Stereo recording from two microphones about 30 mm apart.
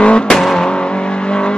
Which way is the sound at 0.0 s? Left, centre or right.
Left.